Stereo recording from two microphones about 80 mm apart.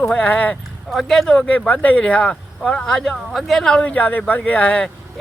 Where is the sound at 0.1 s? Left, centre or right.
Centre.